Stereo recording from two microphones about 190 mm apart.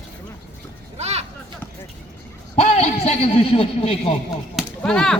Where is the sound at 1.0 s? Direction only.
35° right (ahead or behind).